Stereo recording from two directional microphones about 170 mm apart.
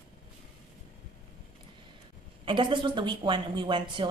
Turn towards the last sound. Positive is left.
turn(degrees=-30)  # may be behind; listen again after turning